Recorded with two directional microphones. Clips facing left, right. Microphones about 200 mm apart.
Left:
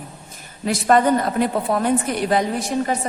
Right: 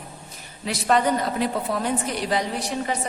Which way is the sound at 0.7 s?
50° left (ahead or behind).